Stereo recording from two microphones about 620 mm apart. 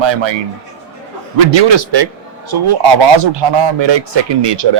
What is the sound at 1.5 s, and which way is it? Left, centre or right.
Speech, right.